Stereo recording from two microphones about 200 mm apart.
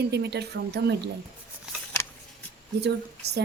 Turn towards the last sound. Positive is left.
turn(degrees=-55)  # may be behind; listen again after turning